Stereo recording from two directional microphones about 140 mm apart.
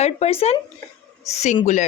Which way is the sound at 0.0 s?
45° left (ahead or behind).